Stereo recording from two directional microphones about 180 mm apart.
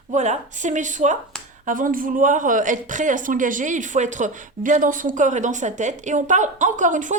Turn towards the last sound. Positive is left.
turn(degrees=-45)  # may be behind; listen again after turning